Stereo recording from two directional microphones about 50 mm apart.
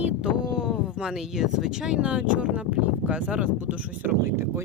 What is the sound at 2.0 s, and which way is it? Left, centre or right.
Speech, right.